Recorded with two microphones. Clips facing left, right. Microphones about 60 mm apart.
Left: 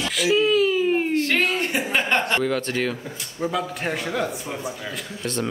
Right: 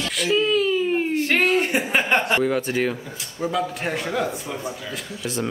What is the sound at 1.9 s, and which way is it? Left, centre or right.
A man's voice, centre.